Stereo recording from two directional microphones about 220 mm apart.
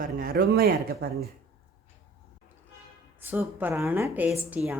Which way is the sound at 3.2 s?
10° right (ahead or behind).